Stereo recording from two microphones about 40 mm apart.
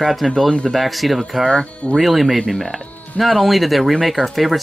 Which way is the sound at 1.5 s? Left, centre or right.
Centre.